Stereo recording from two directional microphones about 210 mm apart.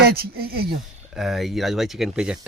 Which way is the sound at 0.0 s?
50° right (ahead or behind).